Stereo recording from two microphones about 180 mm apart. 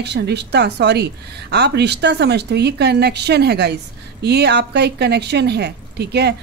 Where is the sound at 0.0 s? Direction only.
70° right (ahead or behind).